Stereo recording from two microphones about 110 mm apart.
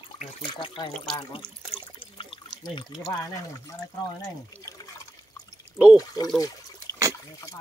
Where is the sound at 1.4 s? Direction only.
40° left (ahead or behind).